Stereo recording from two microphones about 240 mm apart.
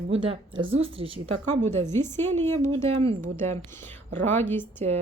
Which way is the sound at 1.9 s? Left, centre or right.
Centre.